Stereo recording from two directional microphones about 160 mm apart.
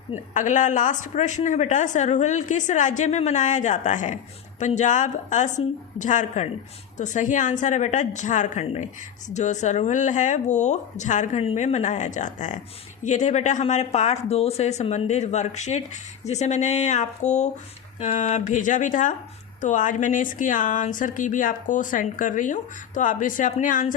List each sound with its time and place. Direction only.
0.3 s speech: 50° left (ahead or behind)